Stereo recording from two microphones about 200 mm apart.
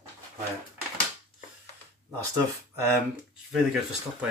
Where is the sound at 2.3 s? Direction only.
15° right (ahead or behind).